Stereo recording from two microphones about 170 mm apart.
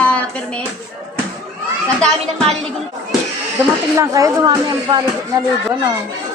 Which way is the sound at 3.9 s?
20° right (ahead or behind).